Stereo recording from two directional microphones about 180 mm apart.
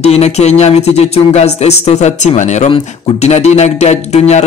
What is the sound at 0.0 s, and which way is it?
Speech, 35° left (ahead or behind).